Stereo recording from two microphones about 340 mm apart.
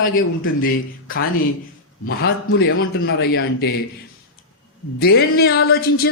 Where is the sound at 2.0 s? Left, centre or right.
Left.